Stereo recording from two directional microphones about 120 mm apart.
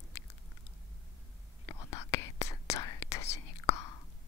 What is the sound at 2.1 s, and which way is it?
Whispering, 25° left (ahead or behind).